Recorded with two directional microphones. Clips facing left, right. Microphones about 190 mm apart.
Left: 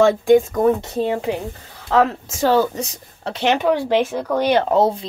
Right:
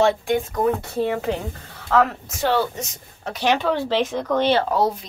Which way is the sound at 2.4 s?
40° left (ahead or behind).